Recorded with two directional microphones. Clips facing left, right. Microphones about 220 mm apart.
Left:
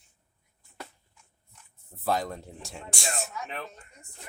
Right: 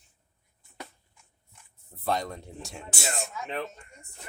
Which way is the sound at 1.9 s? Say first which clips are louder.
Left 1 dB; centre (ahead or behind).